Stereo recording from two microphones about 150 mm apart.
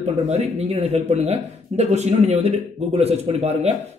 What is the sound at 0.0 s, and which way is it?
Speech, 45° right (ahead or behind).